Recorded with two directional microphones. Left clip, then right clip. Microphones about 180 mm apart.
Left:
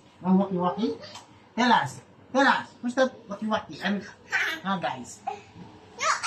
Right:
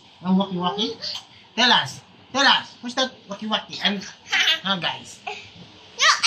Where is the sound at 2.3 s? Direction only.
15° right (ahead or behind).